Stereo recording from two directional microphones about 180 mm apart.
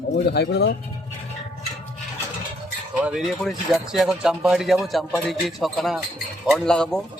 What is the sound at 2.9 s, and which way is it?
Speech, 5° right (ahead or behind).